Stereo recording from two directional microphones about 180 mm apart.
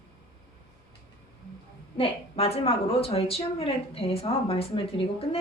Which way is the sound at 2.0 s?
35° left (ahead or behind).